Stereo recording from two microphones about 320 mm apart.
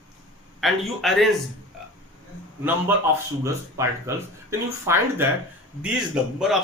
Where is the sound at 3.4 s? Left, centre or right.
Centre.